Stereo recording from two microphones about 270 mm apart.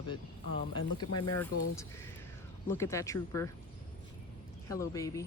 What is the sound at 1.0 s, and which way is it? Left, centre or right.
Speech, left.